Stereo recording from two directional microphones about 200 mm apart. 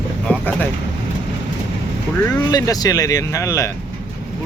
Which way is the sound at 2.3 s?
15° left (ahead or behind).